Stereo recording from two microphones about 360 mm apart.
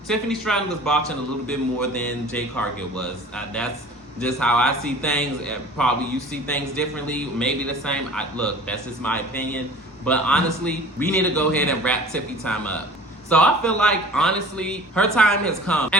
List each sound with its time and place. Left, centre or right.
0.1 s a man's voice: centre
4.2 s a man's voice: centre